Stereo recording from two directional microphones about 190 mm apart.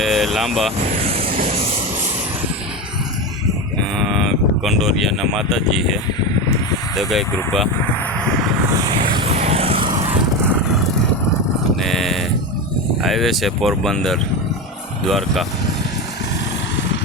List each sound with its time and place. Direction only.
0.0 s speech: centre (ahead or behind)
0.9 s vehicle: 30° right (ahead or behind)
1.3 s a sound: 45° right (ahead or behind)
3.9 s speech: centre (ahead or behind)
8.7 s vehicle: 20° right (ahead or behind)
9.1 s vehicle: 30° right (ahead or behind)
11.8 s speech: centre (ahead or behind)